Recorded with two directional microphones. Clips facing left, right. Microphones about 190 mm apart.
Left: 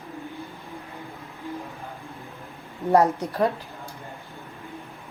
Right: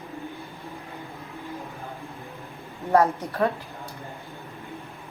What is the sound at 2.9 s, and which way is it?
Speech, 15° left (ahead or behind).